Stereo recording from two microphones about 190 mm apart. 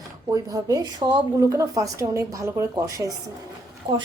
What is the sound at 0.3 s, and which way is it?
A woman's voice, 20° right (ahead or behind).